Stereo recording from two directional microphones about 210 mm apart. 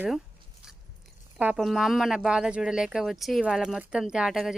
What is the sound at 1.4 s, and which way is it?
Speech, 5° right (ahead or behind).